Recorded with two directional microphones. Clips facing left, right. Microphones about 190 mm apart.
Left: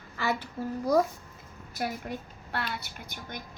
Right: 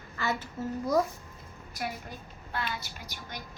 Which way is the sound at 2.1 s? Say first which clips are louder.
Left 6 dB; 65° left (ahead or behind).